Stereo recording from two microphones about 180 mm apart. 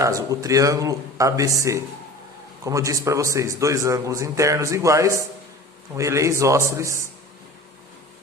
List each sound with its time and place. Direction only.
0.0 s speech: 20° right (ahead or behind)
2.6 s a man's voice: 20° right (ahead or behind)